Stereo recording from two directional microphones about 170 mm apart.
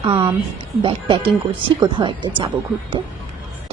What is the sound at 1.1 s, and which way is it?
A woman's voice, 25° right (ahead or behind).